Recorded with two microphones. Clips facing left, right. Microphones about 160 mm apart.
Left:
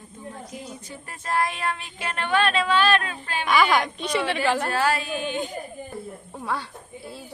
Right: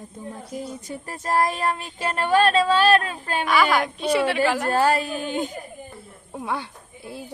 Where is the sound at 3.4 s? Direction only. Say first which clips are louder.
Even; centre (ahead or behind).